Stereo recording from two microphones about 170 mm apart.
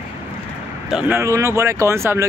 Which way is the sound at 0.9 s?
10° right (ahead or behind).